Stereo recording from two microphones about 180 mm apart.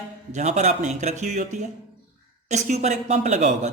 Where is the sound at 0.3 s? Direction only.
40° right (ahead or behind).